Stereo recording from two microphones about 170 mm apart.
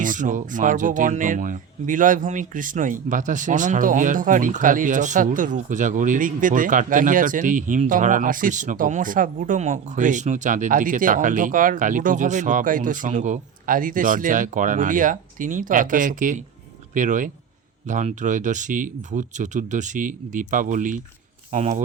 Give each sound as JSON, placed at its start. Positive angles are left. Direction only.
{"t": 0.0, "sound": "speech", "side_deg": -50}